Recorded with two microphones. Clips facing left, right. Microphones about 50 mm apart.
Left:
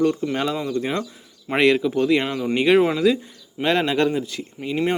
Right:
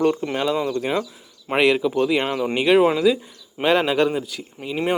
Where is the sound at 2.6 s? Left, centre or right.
Centre.